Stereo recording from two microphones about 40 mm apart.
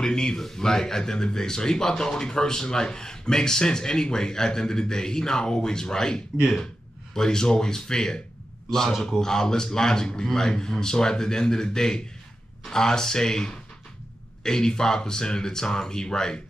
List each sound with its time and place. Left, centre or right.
0.0 s a man's voice: centre